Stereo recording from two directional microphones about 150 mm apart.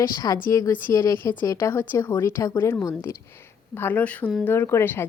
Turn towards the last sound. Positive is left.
turn(degrees=15)  # may be behind; listen again after turning